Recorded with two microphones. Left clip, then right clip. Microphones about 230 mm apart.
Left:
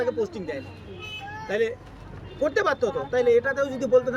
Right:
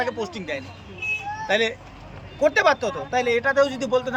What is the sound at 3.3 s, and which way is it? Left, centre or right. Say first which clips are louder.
Speech: right 3 dB; right.